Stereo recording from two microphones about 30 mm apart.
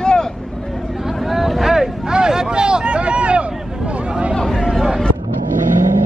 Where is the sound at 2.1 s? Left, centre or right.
Right.